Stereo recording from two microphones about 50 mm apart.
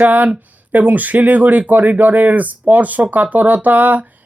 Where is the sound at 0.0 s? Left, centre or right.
Right.